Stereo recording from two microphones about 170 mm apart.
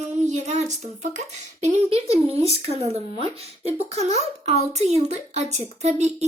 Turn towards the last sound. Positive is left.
turn(degrees=-40)  # may be behind; listen again after turning